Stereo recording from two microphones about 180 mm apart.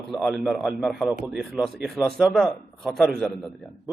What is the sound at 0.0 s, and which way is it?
A man's voice, centre (ahead or behind).